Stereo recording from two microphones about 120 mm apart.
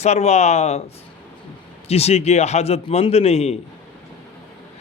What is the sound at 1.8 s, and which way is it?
Speech, 60° left (ahead or behind).